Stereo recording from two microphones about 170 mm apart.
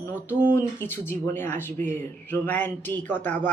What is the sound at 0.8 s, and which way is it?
A man's voice, 15° left (ahead or behind).